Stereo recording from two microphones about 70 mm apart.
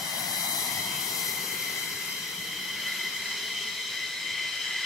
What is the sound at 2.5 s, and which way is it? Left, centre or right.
Train, centre.